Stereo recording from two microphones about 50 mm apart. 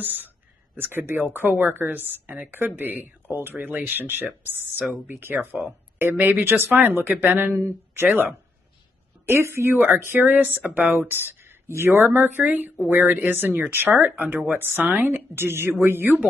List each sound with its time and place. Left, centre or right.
0.0 s speech: right
7.5 s speech: right
9.3 s speech: right
9.8 s speech: right
12.4 s speech: right
14.6 s speech: right